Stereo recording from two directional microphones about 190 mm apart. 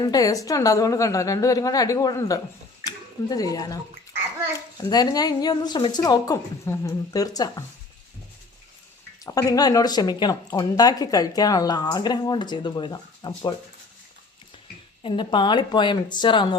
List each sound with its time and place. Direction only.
0.0 s a woman's voice: 20° left (ahead or behind)
4.8 s speech: 20° left (ahead or behind)
9.2 s speech: 20° left (ahead or behind)
15.0 s speech: 25° left (ahead or behind)